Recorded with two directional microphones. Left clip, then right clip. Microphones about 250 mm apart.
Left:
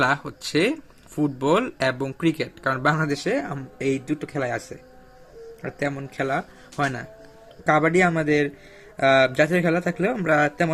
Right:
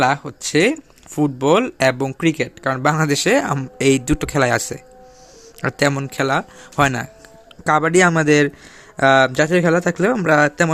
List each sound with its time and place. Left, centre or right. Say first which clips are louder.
0.0 s speech: right 4 dB; centre